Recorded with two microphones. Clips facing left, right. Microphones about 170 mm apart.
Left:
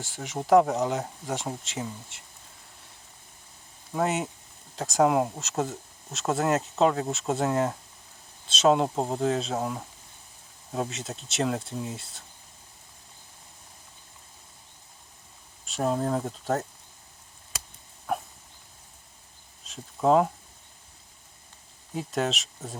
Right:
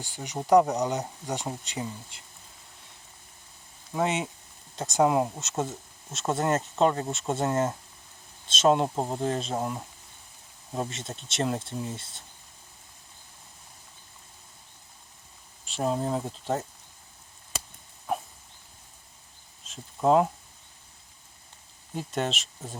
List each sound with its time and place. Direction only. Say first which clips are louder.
0.0 s speech: left 1 dB; centre (ahead or behind)
3.9 s speech: left 1 dB; centre (ahead or behind)
15.6 s speech: left 1 dB; centre (ahead or behind)
19.6 s speech: even; centre (ahead or behind)
21.9 s speech: left 2 dB; centre (ahead or behind)